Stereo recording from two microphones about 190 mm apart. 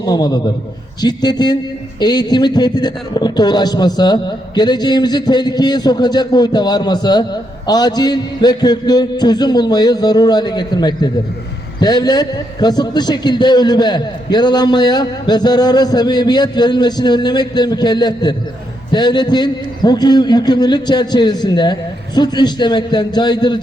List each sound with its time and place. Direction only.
0.0 s a man's voice: 20° left (ahead or behind)